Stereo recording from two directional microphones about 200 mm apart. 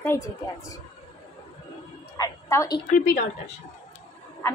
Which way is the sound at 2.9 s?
40° left (ahead or behind).